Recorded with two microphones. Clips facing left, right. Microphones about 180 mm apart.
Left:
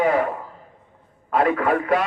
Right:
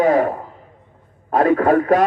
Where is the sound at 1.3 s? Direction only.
40° right (ahead or behind).